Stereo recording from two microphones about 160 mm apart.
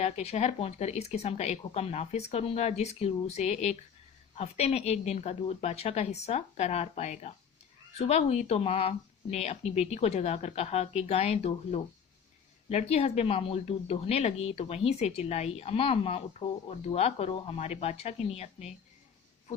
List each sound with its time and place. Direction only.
0.0 s speech: 40° left (ahead or behind)